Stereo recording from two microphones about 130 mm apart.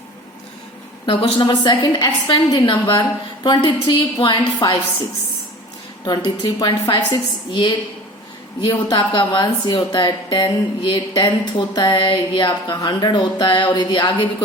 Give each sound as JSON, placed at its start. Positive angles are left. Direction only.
{"t": 1.0, "sound": "speech", "side_deg": 40}
{"t": 6.1, "sound": "speech", "side_deg": 30}